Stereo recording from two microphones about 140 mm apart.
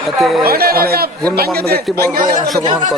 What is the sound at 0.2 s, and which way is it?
Speech, centre (ahead or behind).